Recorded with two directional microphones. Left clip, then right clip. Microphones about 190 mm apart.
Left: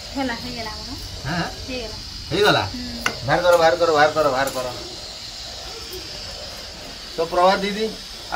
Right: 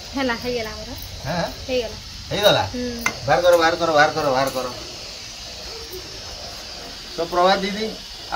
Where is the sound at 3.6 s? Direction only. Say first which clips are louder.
Left 1 dB; 15° right (ahead or behind).